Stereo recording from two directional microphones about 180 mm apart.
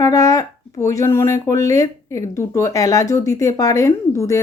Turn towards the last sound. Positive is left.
turn(degrees=15)  # may be behind; listen again after turning